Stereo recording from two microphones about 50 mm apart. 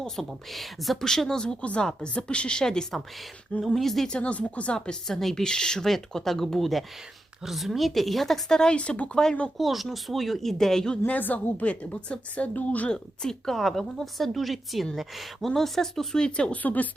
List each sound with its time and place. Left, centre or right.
0.3 s a woman's voice: centre
1.6 s a woman's voice: left
3.8 s a woman's voice: centre
4.1 s a woman's voice: left; by 8.4 s centre
8.4 s speech: centre
9.6 s a woman's voice: centre
11.0 s a woman's voice: left
12.9 s a woman's voice: centre
16.6 s speech: left